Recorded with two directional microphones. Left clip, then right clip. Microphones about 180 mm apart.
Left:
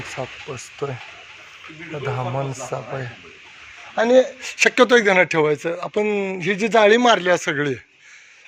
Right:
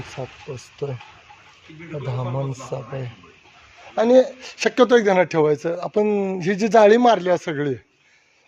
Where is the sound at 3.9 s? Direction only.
20° right (ahead or behind).